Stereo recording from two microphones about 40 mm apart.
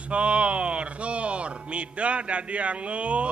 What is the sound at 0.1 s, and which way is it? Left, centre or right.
Speech, right.